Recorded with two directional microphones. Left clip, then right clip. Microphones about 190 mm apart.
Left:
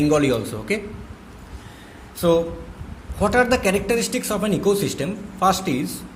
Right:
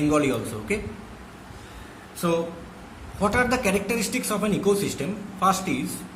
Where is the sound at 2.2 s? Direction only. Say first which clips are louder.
Left 7 dB; 40° left (ahead or behind).